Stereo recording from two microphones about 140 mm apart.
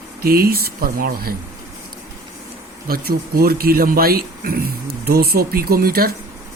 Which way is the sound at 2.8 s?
90° right.